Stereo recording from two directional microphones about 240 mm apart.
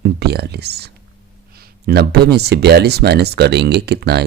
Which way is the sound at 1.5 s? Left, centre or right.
Right.